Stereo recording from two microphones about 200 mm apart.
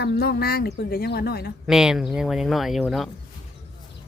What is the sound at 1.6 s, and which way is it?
Speech, 5° right (ahead or behind).